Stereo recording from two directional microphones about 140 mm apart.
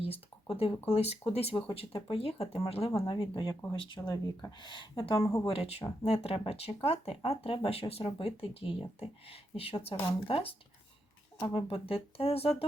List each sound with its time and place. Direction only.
0.0 s a sound: 45° left (ahead or behind)
0.9 s speech: 45° left (ahead or behind)
3.5 s speech: 20° left (ahead or behind)
3.8 s speech: 35° left (ahead or behind)
5.2 s speech: 20° left (ahead or behind)
5.5 s speech: 45° left (ahead or behind)